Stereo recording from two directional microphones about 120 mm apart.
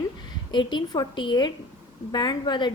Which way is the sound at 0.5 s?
40° left (ahead or behind).